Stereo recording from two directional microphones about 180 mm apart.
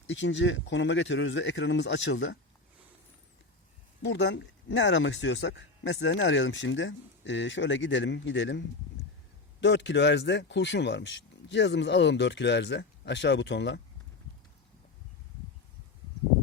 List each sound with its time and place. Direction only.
0.1 s speech: 90° left
4.0 s speech: 90° left
9.6 s speech: 80° left